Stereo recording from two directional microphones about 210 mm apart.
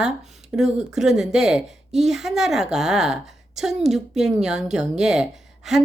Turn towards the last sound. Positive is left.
turn(degrees=0)  # may be behind; listen again after turning